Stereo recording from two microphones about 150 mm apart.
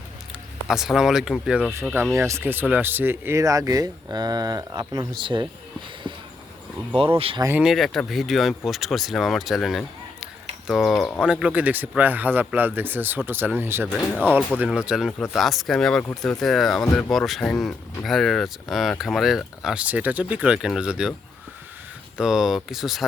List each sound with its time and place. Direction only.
0.7 s speech: 5° right (ahead or behind)
2.1 s speech: 20° right (ahead or behind)
6.9 s speech: 40° right (ahead or behind)
7.6 s speech: centre (ahead or behind)
13.8 s speech: 10° left (ahead or behind)
14.7 s speech: 5° right (ahead or behind)
22.2 s speech: centre (ahead or behind)